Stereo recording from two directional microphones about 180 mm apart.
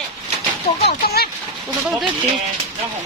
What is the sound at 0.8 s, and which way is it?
Speech, 60° left (ahead or behind).